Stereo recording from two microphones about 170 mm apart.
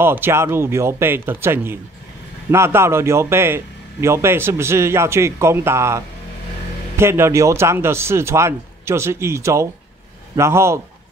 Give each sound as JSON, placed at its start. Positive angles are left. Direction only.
{"t": 0.0, "sound": "a man's voice", "side_deg": -15}